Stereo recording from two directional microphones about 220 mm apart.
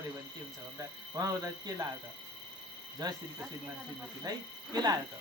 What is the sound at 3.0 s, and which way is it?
Speech, 20° right (ahead or behind).